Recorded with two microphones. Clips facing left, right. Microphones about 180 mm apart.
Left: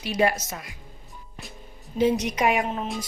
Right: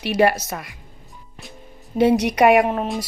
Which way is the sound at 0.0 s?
65° right (ahead or behind).